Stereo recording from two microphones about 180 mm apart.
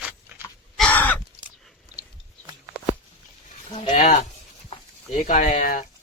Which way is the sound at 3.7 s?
35° left (ahead or behind).